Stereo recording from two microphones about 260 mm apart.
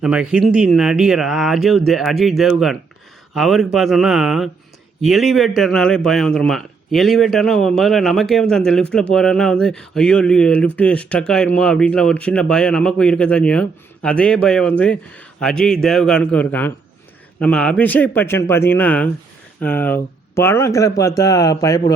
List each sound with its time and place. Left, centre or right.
0.0 s speech: centre